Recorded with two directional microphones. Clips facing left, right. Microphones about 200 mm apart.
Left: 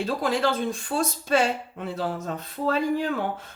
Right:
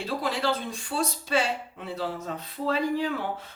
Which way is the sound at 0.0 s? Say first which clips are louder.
Left 4 dB; 45° left (ahead or behind).